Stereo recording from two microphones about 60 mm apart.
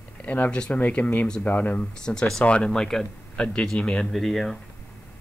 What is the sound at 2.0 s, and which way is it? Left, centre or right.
Speech, centre.